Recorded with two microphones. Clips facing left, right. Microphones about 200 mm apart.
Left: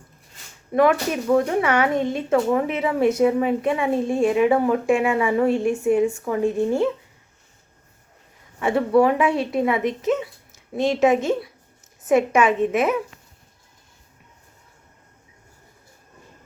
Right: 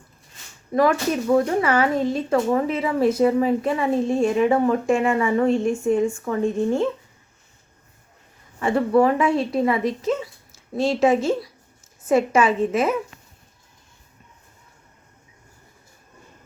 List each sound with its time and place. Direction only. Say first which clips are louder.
0.7 s speech: left 1 dB; 5° left (ahead or behind)
8.5 s speech: even; centre (ahead or behind)
9.7 s a woman's voice: left 1 dB; 20° left (ahead or behind)
12.6 s speech: left 1 dB; centre (ahead or behind)